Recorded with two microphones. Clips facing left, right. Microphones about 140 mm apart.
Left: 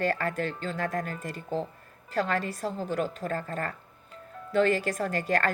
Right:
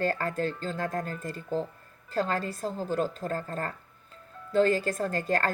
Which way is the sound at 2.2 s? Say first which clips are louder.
Left 1 dB; 35° right (ahead or behind).